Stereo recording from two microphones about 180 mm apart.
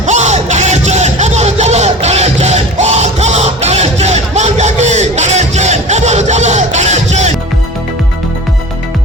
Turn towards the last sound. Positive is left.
turn(degrees=-40)  # may be behind; listen again after turning